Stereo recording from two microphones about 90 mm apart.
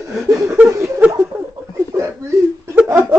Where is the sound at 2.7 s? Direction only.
15° right (ahead or behind).